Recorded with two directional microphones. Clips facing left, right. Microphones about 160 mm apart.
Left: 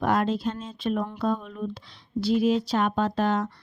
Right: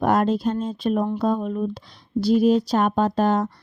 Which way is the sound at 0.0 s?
45° right (ahead or behind).